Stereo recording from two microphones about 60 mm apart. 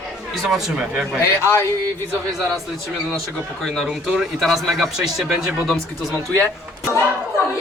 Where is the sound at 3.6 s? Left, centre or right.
Centre.